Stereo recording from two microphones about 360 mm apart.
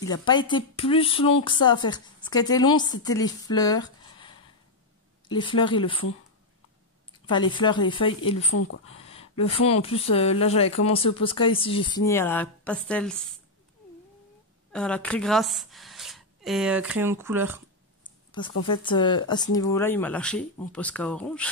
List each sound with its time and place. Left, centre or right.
0.0 s a woman's voice: centre
5.3 s a woman's voice: centre
7.1 s a woman's voice: centre
8.5 s speech: left
9.1 s a woman's voice: centre
14.7 s speech: centre
18.8 s speech: centre